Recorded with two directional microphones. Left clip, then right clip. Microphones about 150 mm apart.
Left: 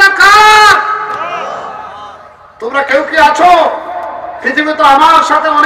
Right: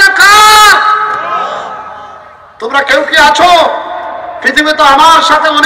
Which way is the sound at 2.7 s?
35° right (ahead or behind).